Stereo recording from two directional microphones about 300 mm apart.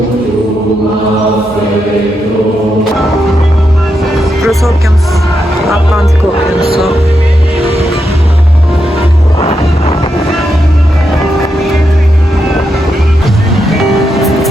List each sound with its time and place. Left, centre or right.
4.2 s music: centre
5.6 s speech: centre
9.4 s music: centre
13.6 s music: centre